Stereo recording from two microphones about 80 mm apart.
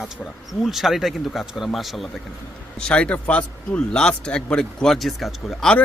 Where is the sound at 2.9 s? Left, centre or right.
Centre.